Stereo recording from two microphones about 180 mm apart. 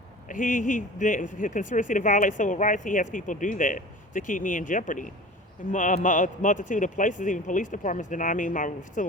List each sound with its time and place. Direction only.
0.3 s speech: 45° left (ahead or behind)